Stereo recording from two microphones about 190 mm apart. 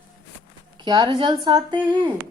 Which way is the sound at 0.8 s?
20° right (ahead or behind).